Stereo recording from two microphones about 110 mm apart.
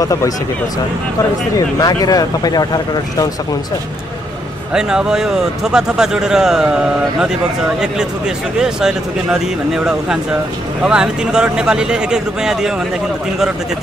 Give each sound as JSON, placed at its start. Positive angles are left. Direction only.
{"t": 0.0, "sound": "speech", "side_deg": 30}
{"t": 1.8, "sound": "speech", "side_deg": 35}
{"t": 4.7, "sound": "a man's voice", "side_deg": -5}
{"t": 8.5, "sound": "a man's voice", "side_deg": -5}